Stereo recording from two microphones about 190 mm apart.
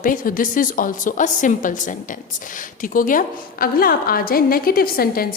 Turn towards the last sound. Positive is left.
turn(degrees=50)  # may be behind; listen again after turning